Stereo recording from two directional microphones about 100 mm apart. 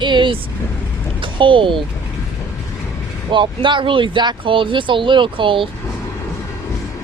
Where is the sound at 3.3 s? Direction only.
55° right (ahead or behind).